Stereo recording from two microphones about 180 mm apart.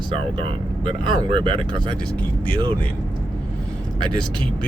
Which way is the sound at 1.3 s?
30° right (ahead or behind).